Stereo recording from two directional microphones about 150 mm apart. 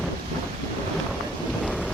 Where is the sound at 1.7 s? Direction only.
5° right (ahead or behind).